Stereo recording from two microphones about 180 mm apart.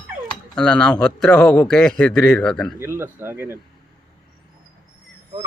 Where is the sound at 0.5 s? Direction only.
5° left (ahead or behind).